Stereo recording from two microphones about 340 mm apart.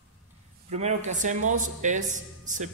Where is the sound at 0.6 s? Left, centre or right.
Centre.